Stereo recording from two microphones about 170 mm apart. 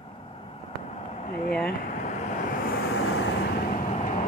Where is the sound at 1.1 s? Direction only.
40° left (ahead or behind).